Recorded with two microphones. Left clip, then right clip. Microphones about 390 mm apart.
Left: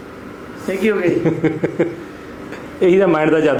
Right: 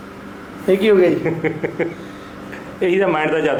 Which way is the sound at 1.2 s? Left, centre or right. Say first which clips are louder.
Left 3 dB; left.